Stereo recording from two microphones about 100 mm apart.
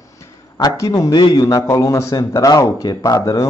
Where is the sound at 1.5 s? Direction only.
30° left (ahead or behind).